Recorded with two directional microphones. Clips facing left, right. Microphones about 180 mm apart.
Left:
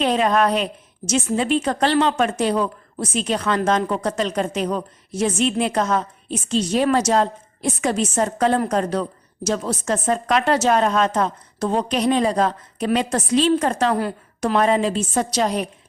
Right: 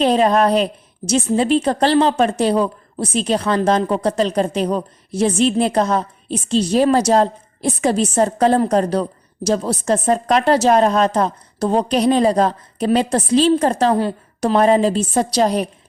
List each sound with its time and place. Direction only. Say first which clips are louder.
0.0 s a woman's voice: right 4 dB; 35° right (ahead or behind)